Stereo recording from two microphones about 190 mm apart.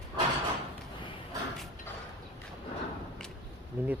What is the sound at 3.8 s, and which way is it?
Speech, 10° right (ahead or behind).